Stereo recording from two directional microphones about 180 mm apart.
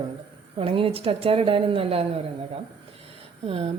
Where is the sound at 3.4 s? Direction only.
30° right (ahead or behind).